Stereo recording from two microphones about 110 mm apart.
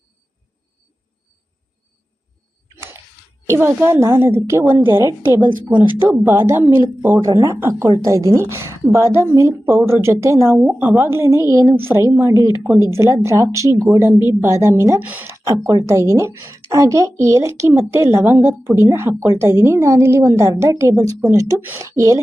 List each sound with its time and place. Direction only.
3.4 s speech: 25° right (ahead or behind)
15.4 s speech: 30° right (ahead or behind)